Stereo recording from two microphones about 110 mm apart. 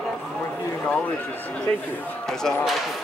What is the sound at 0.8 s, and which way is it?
Speech, 10° left (ahead or behind).